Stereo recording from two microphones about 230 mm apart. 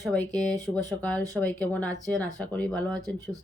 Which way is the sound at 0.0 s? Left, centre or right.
Centre.